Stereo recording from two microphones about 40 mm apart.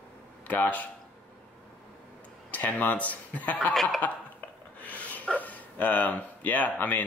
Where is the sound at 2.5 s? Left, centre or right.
Left.